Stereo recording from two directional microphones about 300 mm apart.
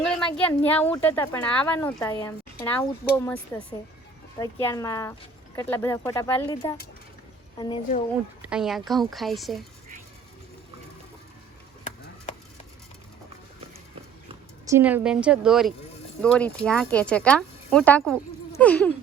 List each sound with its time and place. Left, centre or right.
0.0 s a sound: centre
0.3 s speech: centre
4.6 s a woman's voice: centre
8.4 s speech: centre
12.3 s a sound: left
14.7 s speech: centre